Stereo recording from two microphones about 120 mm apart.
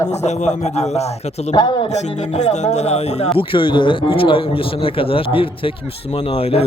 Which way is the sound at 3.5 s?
45° left (ahead or behind).